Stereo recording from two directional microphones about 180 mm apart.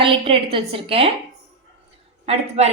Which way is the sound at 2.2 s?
35° right (ahead or behind).